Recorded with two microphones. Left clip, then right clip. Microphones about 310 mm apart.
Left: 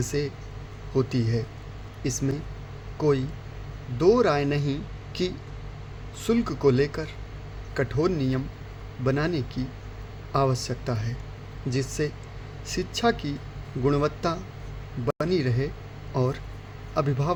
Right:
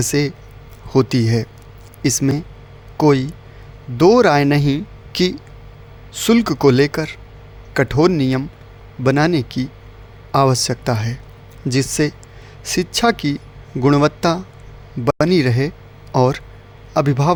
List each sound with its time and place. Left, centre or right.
0.0 s a man's voice: right